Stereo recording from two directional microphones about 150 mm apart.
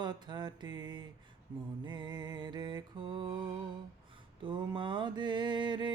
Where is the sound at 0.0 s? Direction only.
30° right (ahead or behind).